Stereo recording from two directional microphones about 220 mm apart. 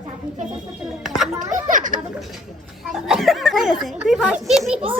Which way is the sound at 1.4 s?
35° right (ahead or behind).